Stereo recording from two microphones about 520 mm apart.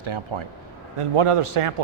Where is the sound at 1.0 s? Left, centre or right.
Right.